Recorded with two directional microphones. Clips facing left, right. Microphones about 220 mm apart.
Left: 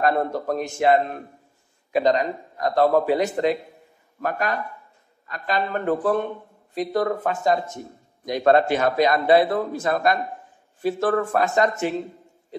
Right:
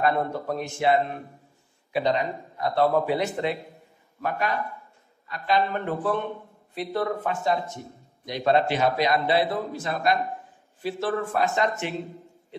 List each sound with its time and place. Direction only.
0.0 s speech: 40° left (ahead or behind)